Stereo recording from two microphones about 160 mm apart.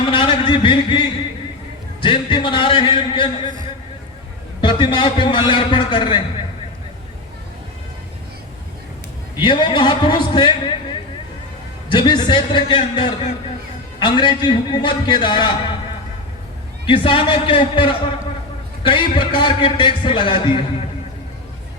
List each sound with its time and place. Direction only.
0.1 s a sound: 30° left (ahead or behind)
2.0 s a man's voice: 30° left (ahead or behind)
4.6 s a man's voice: 30° left (ahead or behind)
9.4 s a man's voice: 30° left (ahead or behind)
11.9 s a man's voice: 25° left (ahead or behind)
16.8 s a man's voice: 30° left (ahead or behind)